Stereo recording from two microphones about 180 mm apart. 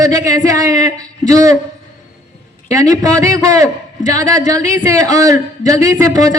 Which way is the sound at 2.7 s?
20° right (ahead or behind).